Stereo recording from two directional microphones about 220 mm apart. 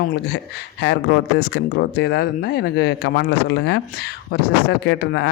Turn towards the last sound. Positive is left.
turn(degrees=50)  # may be behind; listen again after turning